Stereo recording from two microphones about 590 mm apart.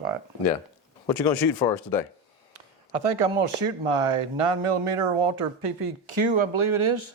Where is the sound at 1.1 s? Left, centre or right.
Left.